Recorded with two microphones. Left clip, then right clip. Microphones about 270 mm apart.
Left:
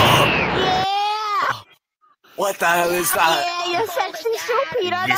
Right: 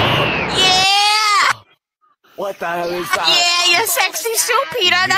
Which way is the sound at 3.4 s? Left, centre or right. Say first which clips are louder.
Right 8 dB; right.